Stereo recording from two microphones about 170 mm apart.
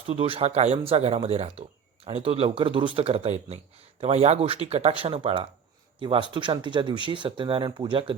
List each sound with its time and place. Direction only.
0.1 s speech: 35° right (ahead or behind)